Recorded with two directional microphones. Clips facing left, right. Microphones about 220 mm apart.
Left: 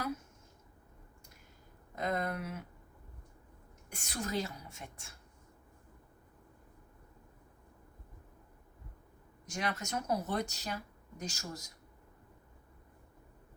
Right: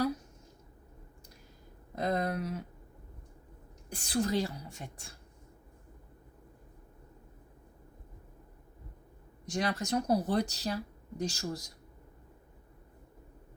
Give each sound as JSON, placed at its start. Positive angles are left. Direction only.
{"t": 2.0, "sound": "speech", "side_deg": -35}
{"t": 3.9, "sound": "a woman's voice", "side_deg": -35}
{"t": 9.5, "sound": "a woman's voice", "side_deg": -35}